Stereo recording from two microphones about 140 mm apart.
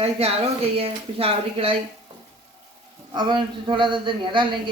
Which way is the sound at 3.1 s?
35° right (ahead or behind).